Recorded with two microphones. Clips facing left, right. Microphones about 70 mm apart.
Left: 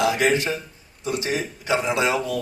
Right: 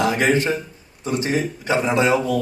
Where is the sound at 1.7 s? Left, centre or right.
Right.